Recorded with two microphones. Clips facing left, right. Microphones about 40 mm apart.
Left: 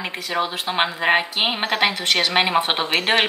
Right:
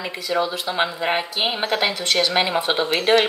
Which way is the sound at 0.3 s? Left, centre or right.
Left.